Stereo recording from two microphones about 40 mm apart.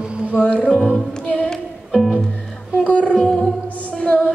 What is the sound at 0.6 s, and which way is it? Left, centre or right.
Music, left.